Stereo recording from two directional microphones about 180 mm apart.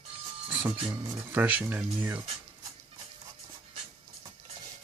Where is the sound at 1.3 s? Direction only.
10° right (ahead or behind).